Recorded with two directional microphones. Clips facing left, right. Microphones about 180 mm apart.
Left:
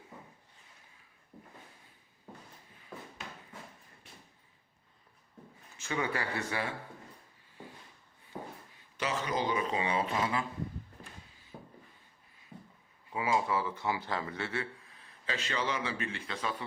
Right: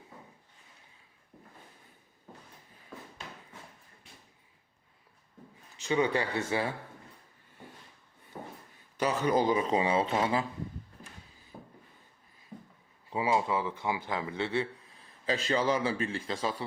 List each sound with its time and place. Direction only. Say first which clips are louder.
5.7 s speech: right 6 dB; 20° right (ahead or behind)
9.0 s a man's voice: right 6 dB; 45° right (ahead or behind)
9.6 s speech: right 5 dB; 30° right (ahead or behind)
13.1 s a man's voice: right 2 dB; 25° right (ahead or behind)
15.3 s a man's voice: right 7 dB; 35° right (ahead or behind)